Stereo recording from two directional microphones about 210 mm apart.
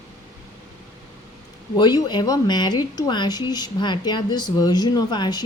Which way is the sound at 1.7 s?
20° left (ahead or behind).